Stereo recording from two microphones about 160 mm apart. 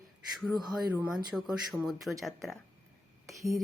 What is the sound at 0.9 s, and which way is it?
Speech, 5° right (ahead or behind).